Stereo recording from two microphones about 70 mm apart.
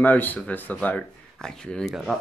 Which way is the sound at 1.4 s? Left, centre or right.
Centre.